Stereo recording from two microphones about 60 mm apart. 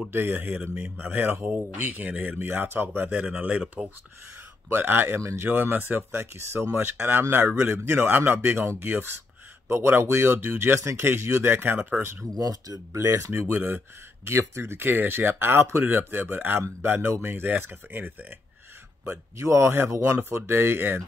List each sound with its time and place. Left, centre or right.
0.1 s speech: right
3.1 s speech: right
4.6 s speech: right
10.8 s speech: right
12.4 s speech: right
12.9 s speech: right
13.3 s speech: right
19.0 s speech: right